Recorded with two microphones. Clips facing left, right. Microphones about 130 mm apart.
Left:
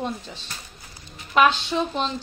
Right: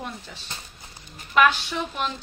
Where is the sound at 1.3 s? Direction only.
20° left (ahead or behind).